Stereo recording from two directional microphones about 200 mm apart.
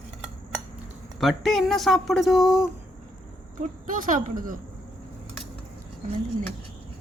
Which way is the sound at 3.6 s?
40° right (ahead or behind).